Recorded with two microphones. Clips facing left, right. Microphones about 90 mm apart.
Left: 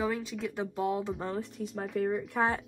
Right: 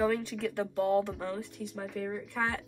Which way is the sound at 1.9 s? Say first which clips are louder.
Left 7 dB; 55° left (ahead or behind).